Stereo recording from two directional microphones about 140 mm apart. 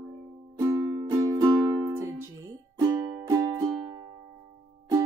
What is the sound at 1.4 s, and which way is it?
Music, 20° right (ahead or behind).